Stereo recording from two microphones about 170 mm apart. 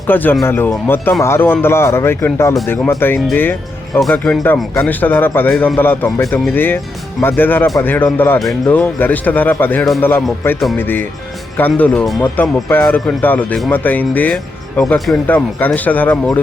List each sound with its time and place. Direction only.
0.1 s speech: 10° left (ahead or behind)